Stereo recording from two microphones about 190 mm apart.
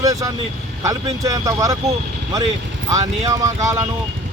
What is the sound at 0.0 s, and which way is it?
Speech, 20° right (ahead or behind).